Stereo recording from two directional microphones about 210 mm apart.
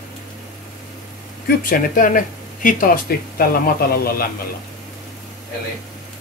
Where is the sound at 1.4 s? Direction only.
40° left (ahead or behind).